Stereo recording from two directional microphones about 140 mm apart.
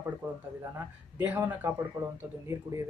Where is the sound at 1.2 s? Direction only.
10° right (ahead or behind).